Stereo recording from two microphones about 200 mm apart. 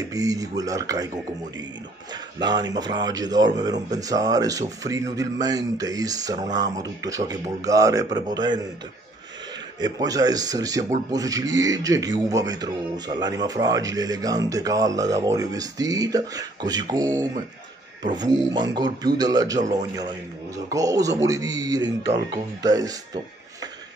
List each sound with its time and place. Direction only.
0.1 s speech: 15° right (ahead or behind)
2.3 s speech: 20° right (ahead or behind)
9.8 s speech: 20° right (ahead or behind)
18.0 s speech: 20° right (ahead or behind)
20.7 s speech: 15° right (ahead or behind)